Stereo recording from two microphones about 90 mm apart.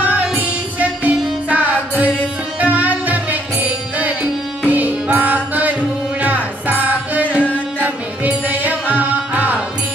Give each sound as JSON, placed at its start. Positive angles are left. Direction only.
{"t": 0.1, "sound": "music", "side_deg": -15}
{"t": 8.9, "sound": "tabla", "side_deg": -15}